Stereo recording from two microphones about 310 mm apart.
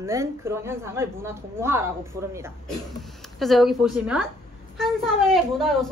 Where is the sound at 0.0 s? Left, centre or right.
Centre.